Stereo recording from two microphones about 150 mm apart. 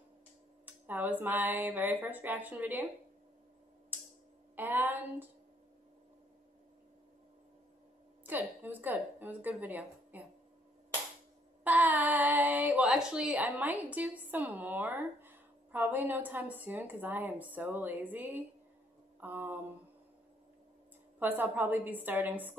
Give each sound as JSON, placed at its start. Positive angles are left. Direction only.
{"t": 0.7, "sound": "speech", "side_deg": -10}
{"t": 4.6, "sound": "speech", "side_deg": -10}
{"t": 8.3, "sound": "speech", "side_deg": -15}
{"t": 11.6, "sound": "speech", "side_deg": -10}
{"t": 19.1, "sound": "a sound", "side_deg": -10}
{"t": 21.2, "sound": "speech", "side_deg": -15}